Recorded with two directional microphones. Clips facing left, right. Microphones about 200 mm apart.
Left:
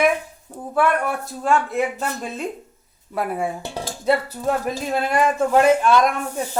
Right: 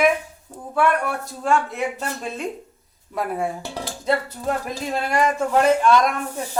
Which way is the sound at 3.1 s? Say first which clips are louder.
Left 1 dB; 5° left (ahead or behind).